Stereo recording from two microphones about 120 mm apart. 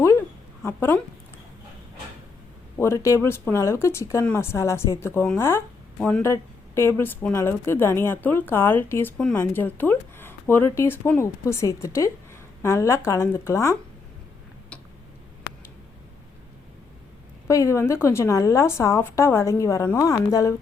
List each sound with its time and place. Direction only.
0.6 s speech: 20° left (ahead or behind)
2.7 s speech: 20° left (ahead or behind)
6.2 s speech: 20° left (ahead or behind)
17.5 s speech: 25° left (ahead or behind)